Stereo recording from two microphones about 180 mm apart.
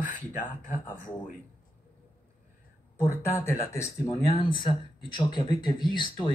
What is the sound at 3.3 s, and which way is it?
Speech, 15° left (ahead or behind).